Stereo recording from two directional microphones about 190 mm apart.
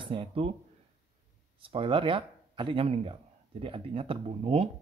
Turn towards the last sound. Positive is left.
turn(degrees=-35)  # may be behind; listen again after turning